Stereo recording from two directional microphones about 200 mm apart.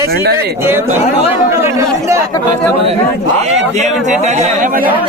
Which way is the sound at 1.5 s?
15° right (ahead or behind).